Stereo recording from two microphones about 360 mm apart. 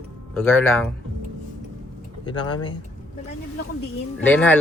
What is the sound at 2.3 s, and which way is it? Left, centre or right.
Speech, centre.